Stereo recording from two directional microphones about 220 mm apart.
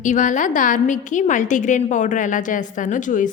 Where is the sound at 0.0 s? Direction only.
35° left (ahead or behind).